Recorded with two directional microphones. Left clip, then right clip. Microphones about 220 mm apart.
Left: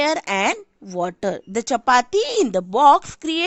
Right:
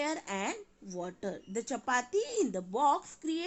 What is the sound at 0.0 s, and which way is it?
Speech, 50° left (ahead or behind).